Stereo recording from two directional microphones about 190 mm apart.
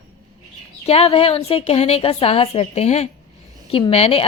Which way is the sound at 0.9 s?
30° left (ahead or behind).